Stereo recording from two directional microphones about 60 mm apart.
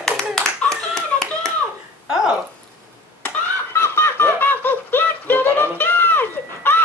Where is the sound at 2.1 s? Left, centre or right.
Centre.